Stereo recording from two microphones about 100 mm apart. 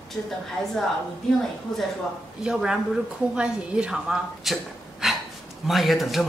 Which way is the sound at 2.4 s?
5° right (ahead or behind).